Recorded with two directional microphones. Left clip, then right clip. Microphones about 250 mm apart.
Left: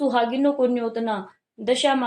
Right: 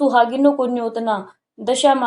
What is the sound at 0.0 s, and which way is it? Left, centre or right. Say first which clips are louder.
A woman's voice: right 6 dB; centre.